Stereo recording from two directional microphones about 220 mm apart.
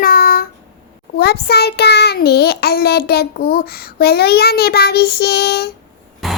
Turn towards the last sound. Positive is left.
turn(degrees=0)  # may be behind; listen again after turning